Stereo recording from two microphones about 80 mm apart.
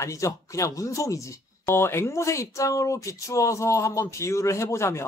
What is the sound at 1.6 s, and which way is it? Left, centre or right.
Speech, left.